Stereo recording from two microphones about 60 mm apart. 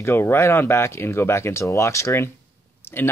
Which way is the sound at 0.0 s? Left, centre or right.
Left.